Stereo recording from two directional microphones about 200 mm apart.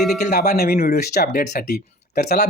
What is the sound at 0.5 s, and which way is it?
Speech, 50° left (ahead or behind).